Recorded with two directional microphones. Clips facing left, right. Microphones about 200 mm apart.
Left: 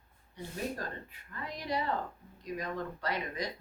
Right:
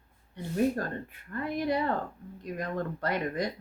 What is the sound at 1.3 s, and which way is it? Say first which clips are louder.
Speech: right 8 dB; 55° right (ahead or behind).